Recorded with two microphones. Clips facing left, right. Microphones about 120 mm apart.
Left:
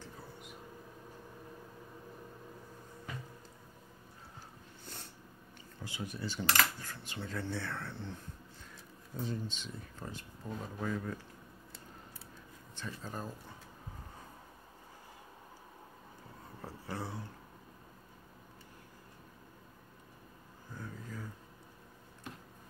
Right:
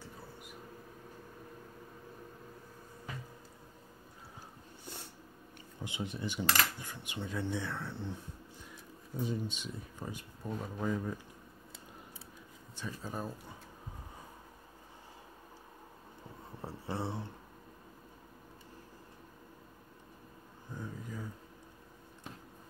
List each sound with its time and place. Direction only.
5.8 s coin: 20° right (ahead or behind)
9.2 s coin: 10° right (ahead or behind)
13.0 s coin: 10° right (ahead or behind)
16.6 s speech: 25° right (ahead or behind)
20.7 s a sound: 15° right (ahead or behind)